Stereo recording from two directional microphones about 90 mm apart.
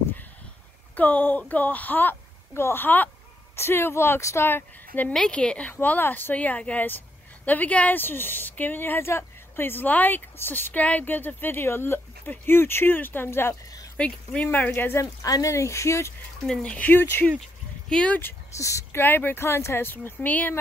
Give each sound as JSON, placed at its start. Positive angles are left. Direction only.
{"t": 0.9, "sound": "speech", "side_deg": 20}
{"t": 5.1, "sound": "speech", "side_deg": 10}
{"t": 13.9, "sound": "speech", "side_deg": 15}
{"t": 14.7, "sound": "speech", "side_deg": 30}
{"t": 16.4, "sound": "speech", "side_deg": 15}
{"t": 17.8, "sound": "speech", "side_deg": 10}
{"t": 18.6, "sound": "speech", "side_deg": 35}
{"t": 18.9, "sound": "speech", "side_deg": 20}